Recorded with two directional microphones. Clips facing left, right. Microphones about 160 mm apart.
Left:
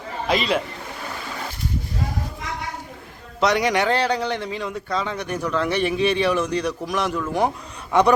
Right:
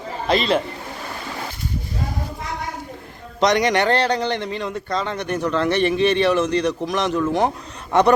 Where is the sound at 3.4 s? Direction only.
5° left (ahead or behind).